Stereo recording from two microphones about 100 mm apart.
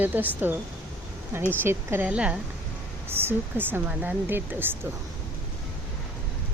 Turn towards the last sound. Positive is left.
turn(degrees=-20)  # may be behind; listen again after turning